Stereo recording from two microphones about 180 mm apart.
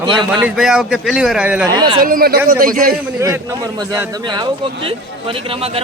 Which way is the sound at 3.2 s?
15° right (ahead or behind).